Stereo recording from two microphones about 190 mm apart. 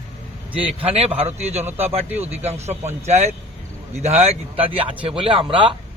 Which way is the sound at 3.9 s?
35° right (ahead or behind).